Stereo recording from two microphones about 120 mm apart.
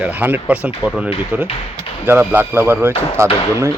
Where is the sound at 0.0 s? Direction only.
15° right (ahead or behind).